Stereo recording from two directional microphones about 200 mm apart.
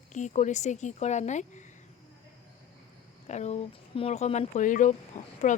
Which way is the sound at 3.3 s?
35° left (ahead or behind).